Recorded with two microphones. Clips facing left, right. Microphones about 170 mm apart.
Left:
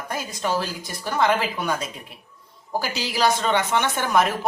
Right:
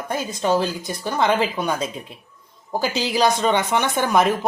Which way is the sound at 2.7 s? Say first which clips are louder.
Right 4 dB; 20° right (ahead or behind).